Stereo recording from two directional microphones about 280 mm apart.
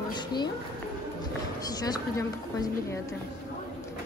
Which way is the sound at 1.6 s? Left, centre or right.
Centre.